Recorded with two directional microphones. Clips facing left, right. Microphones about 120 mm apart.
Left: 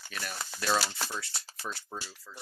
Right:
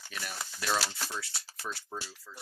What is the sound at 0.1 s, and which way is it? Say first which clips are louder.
Speech: left 2 dB; 15° right (ahead or behind).